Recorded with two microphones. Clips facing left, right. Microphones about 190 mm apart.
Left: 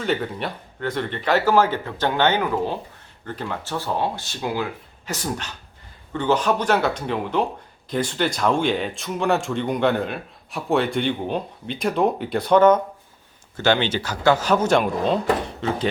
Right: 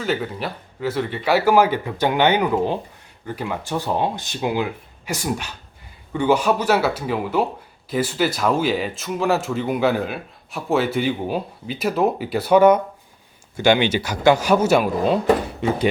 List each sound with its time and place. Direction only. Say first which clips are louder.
0.0 s speech: even; centre (ahead or behind)